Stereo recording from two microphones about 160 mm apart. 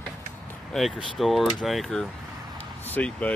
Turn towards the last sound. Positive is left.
turn(degrees=10)  # may be behind; listen again after turning